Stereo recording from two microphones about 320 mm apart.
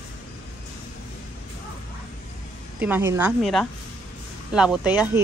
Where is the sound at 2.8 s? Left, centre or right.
Centre.